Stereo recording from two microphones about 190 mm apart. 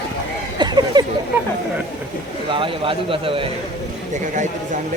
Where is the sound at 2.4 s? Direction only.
25° right (ahead or behind).